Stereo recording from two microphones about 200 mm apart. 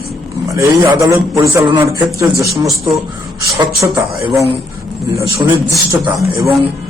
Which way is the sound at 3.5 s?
20° right (ahead or behind).